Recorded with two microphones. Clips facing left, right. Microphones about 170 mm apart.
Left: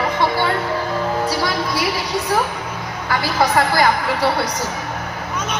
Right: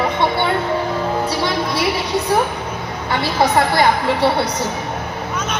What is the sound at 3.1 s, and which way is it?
Speech, 25° right (ahead or behind).